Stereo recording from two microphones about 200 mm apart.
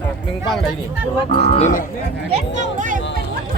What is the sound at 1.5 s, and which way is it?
Speech, 35° left (ahead or behind).